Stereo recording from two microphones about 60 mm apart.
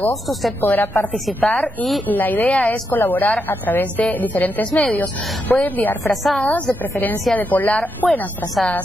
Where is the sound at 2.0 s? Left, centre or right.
Left.